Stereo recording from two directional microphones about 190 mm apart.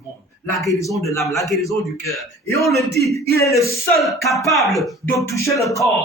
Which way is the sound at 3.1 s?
15° left (ahead or behind).